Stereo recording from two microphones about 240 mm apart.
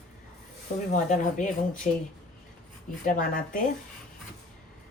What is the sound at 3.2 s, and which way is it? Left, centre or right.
Speech, left.